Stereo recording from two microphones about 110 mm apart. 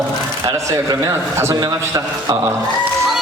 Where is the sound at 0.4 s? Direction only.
30° right (ahead or behind).